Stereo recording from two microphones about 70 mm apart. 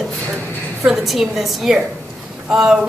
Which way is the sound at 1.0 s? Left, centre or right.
Centre.